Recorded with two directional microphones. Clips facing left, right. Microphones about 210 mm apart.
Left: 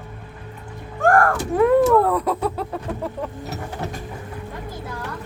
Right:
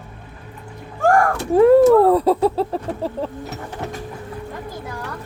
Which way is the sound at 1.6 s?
30° right (ahead or behind).